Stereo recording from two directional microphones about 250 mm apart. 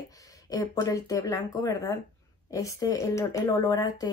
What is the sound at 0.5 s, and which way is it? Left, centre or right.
Speech, centre.